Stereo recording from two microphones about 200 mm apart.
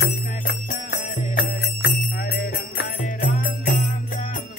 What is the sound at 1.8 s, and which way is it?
Music, 50° left (ahead or behind).